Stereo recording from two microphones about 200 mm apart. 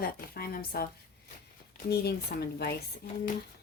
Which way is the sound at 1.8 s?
55° left (ahead or behind).